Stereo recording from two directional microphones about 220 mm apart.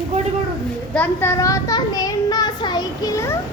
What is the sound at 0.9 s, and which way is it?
A child's voice, 10° left (ahead or behind).